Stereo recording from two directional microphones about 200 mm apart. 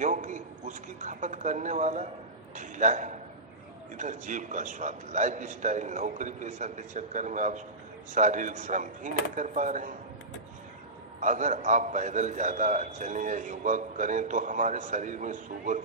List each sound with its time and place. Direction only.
0.0 s a man's voice: 40° right (ahead or behind)
11.1 s a man's voice: 40° right (ahead or behind)